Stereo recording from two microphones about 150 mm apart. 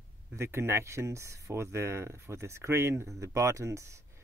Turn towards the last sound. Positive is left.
turn(degrees=-20)  # may be behind; listen again after turning